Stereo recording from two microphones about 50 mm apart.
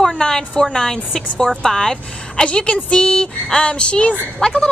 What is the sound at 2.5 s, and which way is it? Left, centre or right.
Speech, left.